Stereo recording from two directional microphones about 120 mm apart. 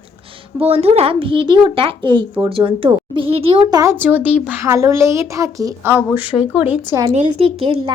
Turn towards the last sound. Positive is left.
turn(degrees=-50)  # may be behind; listen again after turning